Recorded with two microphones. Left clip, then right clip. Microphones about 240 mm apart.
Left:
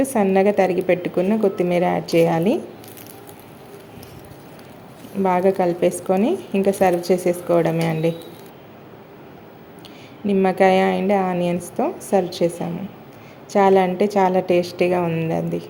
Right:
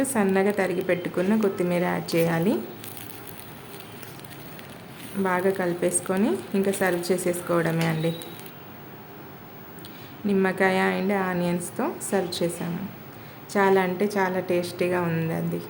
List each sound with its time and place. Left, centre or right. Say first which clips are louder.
0.0 s a woman's voice: left 6 dB; centre
5.2 s a woman's voice: left 7 dB; centre
10.2 s a woman's voice: left 7 dB; centre
11.6 s a woman's voice: left 6 dB; centre
12.1 s a woman's voice: left 7 dB; centre
13.5 s a woman's voice: left 6 dB; centre